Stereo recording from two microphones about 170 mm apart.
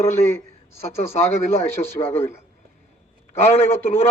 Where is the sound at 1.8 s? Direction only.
25° left (ahead or behind).